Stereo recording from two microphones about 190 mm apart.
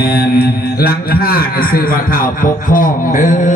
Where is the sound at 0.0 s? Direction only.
55° left (ahead or behind).